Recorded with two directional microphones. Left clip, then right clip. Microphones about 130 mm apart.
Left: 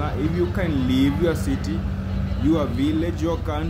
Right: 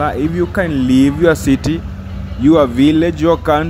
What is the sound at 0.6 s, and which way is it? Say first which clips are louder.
Speech: right 13 dB; 65° right (ahead or behind).